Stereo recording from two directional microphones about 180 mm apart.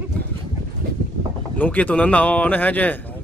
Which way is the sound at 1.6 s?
10° left (ahead or behind).